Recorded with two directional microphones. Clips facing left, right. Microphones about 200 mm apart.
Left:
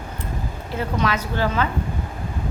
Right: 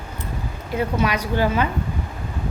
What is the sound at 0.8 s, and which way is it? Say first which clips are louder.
Speech: right 2 dB; 15° right (ahead or behind).